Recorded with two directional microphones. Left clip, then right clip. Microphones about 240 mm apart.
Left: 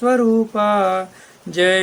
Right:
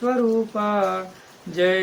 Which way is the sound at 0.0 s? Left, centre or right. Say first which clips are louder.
Left 5 dB; left.